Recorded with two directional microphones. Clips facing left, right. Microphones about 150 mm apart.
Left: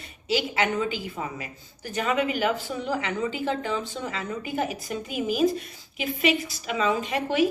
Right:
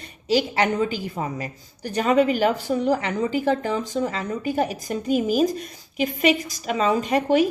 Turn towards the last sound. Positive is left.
turn(degrees=-45)  # may be behind; listen again after turning